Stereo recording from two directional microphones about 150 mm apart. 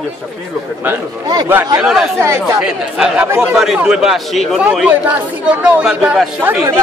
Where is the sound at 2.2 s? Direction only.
15° right (ahead or behind).